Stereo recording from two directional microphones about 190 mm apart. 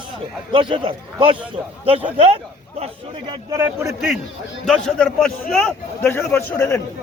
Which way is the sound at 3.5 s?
15° right (ahead or behind).